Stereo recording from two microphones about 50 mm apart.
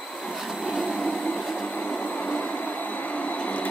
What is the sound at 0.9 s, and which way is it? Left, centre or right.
Train, centre.